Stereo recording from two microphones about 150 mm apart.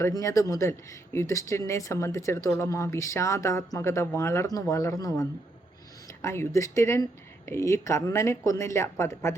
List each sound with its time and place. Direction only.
0.0 s speech: 20° left (ahead or behind)